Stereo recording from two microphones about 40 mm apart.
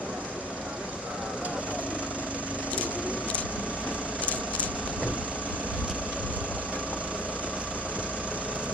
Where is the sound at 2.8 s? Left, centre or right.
Right.